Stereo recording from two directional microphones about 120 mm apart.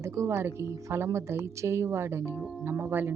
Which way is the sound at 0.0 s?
25° right (ahead or behind).